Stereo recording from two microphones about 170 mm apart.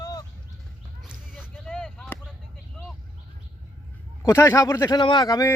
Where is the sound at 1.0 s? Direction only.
5° right (ahead or behind).